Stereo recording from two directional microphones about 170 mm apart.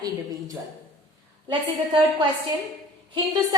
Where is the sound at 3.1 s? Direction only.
25° right (ahead or behind).